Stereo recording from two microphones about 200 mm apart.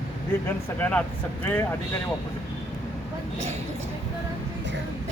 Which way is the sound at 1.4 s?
10° left (ahead or behind).